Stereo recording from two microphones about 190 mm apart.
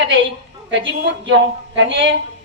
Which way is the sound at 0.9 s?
70° right (ahead or behind).